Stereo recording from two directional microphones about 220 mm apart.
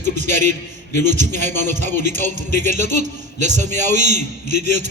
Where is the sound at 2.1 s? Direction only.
35° right (ahead or behind).